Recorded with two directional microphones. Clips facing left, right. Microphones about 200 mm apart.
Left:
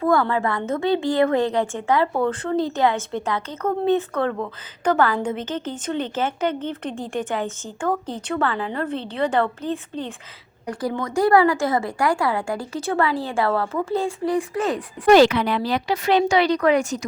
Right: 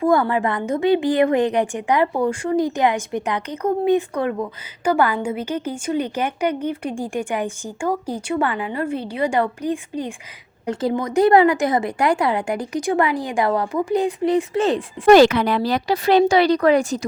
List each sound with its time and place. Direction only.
0.0 s a woman's voice: 15° right (ahead or behind)
10.7 s speech: 25° right (ahead or behind)
15.0 s speech: 45° right (ahead or behind)